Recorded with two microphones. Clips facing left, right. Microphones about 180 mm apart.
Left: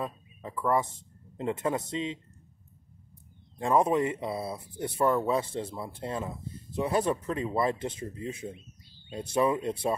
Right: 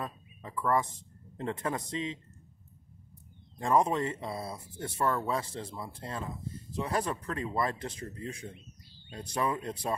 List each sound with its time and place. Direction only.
0.0 s a sound: 25° left (ahead or behind)
1.3 s speech: 20° left (ahead or behind)
3.6 s speech: 20° left (ahead or behind)